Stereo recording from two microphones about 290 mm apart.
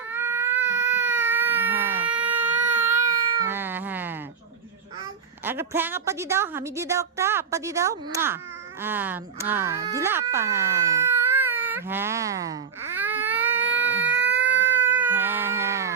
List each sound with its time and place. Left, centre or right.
0.1 s baby cry: centre
3.4 s wail: centre
5.4 s speech: centre
13.0 s baby cry: centre
13.7 s baby cry: right
14.8 s cat: centre